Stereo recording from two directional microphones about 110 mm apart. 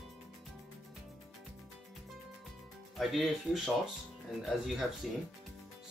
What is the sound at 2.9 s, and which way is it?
Speech, centre (ahead or behind).